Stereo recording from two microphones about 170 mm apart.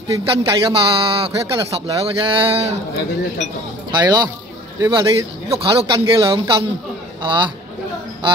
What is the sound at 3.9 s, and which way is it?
A man's voice, 25° right (ahead or behind).